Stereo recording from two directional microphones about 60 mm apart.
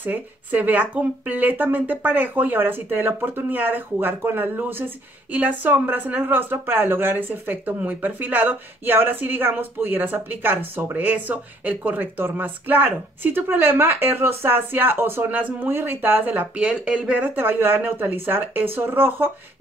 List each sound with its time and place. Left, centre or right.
0.0 s speech: right
16.5 s speech: centre
17.4 s speech: right